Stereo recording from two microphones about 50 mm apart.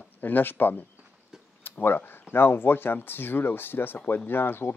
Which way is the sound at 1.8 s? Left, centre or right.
Left.